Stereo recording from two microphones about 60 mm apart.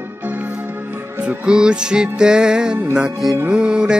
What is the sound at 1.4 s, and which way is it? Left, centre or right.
Music, centre.